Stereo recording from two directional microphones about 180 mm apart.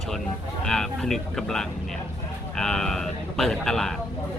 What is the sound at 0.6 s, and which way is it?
Speech, 5° left (ahead or behind).